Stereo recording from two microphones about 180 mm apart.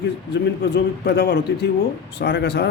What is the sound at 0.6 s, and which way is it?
Speech, 65° left (ahead or behind).